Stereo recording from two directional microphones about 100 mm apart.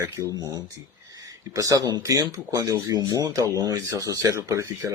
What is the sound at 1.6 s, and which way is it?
Speech, 40° right (ahead or behind).